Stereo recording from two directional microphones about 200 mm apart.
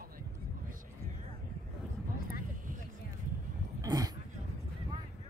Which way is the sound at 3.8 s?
20° right (ahead or behind).